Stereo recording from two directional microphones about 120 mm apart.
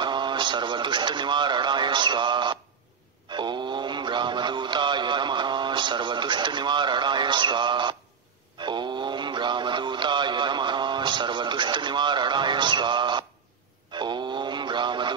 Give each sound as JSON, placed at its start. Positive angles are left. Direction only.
{"t": 0.0, "sound": "radio", "side_deg": -40}
{"t": 3.3, "sound": "mantra", "side_deg": -40}
{"t": 13.9, "sound": "synthetic singing", "side_deg": -40}